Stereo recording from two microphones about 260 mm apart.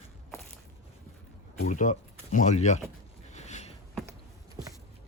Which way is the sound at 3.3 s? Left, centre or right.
Left.